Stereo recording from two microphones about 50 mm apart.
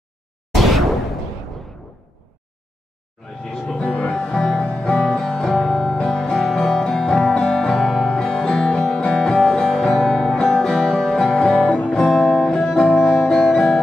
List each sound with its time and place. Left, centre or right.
0.5 s a sound: centre
3.9 s music: left
9.3 s music: centre
11.6 s music: left